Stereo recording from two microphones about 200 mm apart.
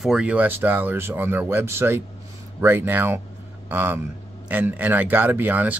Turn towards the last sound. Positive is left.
turn(degrees=-10)  # may be behind; listen again after turning